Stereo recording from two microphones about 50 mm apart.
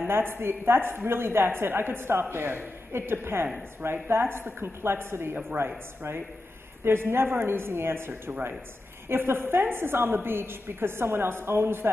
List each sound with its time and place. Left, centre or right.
0.0 s a woman's voice: right
6.8 s a woman's voice: right